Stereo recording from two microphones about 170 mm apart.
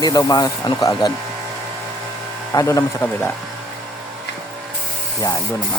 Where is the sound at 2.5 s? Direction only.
15° left (ahead or behind).